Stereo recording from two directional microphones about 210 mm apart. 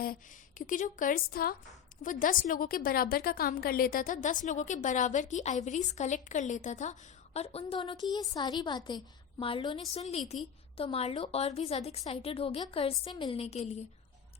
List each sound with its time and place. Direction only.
0.7 s a woman's voice: 40° left (ahead or behind)